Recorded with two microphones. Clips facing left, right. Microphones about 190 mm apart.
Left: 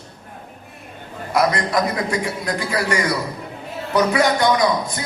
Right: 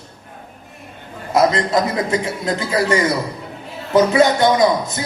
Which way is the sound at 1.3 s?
25° right (ahead or behind).